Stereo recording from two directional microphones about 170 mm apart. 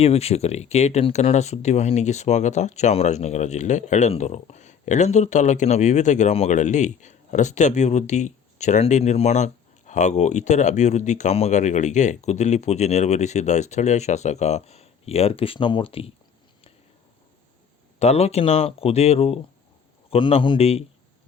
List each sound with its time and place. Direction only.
0.0 s speech: 35° left (ahead or behind)
18.0 s speech: 40° left (ahead or behind)